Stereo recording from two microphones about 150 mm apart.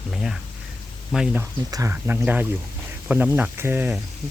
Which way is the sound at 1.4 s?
20° right (ahead or behind).